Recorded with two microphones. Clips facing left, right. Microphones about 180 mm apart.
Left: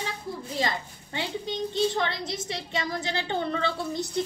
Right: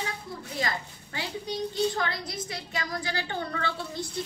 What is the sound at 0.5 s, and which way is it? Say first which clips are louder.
A woman's voice: left 2 dB; 25° left (ahead or behind).